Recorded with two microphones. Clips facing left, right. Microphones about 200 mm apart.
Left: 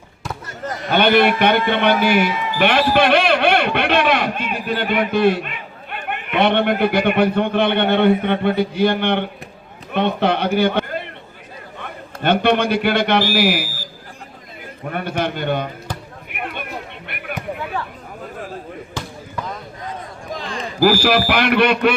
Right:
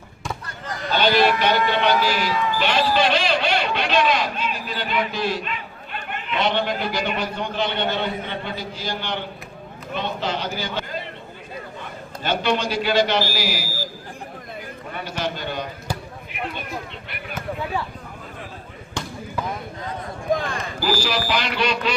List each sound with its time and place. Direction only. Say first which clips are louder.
0.9 s a man's voice: left 4 dB; 60° left (ahead or behind)
14.8 s a man's voice: left 6 dB; 60° left (ahead or behind)
16.3 s a sound: left 2 dB; 60° left (ahead or behind)
19.0 s basketball bounce: right 1 dB; 5° left (ahead or behind)
20.3 s a sound: right 6 dB; 55° right (ahead or behind)
20.8 s a man's voice: left 9 dB; 55° left (ahead or behind)